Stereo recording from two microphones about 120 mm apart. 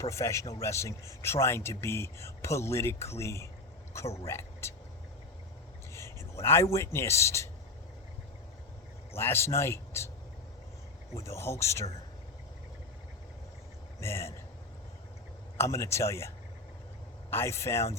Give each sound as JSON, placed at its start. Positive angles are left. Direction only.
{"t": 0.0, "sound": "speech", "side_deg": 25}
{"t": 5.9, "sound": "speech", "side_deg": 25}
{"t": 9.1, "sound": "speech", "side_deg": 20}
{"t": 11.1, "sound": "speech", "side_deg": 25}
{"t": 14.0, "sound": "speech", "side_deg": 20}
{"t": 15.5, "sound": "speech", "side_deg": 25}
{"t": 17.3, "sound": "speech", "side_deg": 20}